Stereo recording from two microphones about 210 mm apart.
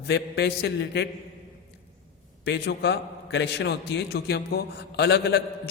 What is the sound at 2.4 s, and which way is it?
A man's voice, 55° left (ahead or behind).